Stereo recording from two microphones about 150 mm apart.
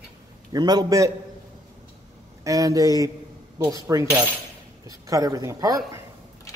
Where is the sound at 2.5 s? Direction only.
20° right (ahead or behind).